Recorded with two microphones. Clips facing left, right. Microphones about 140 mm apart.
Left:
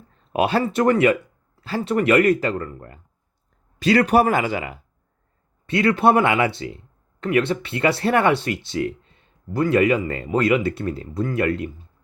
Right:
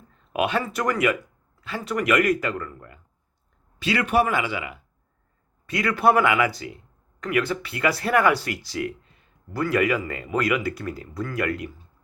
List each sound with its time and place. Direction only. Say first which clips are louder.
0.1 s speech: left 4 dB; 35° left (ahead or behind)
5.6 s speech: left 3 dB; 25° left (ahead or behind)